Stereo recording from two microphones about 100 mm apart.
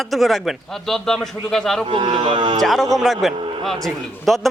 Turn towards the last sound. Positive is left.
turn(degrees=0)  # may be behind; listen again after turning